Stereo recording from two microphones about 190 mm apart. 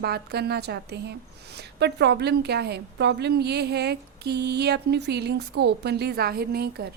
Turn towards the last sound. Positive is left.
turn(degrees=-55)  # may be behind; listen again after turning